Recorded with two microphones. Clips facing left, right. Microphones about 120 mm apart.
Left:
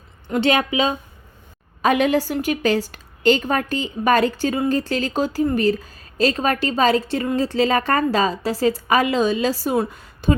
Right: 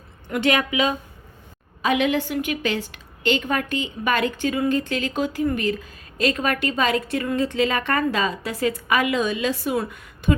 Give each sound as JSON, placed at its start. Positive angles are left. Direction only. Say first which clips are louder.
{"t": 0.3, "sound": "a woman's voice", "louder": "left 3 dB", "side_deg": 30}
{"t": 1.8, "sound": "a woman's voice", "louder": "left 3 dB", "side_deg": 45}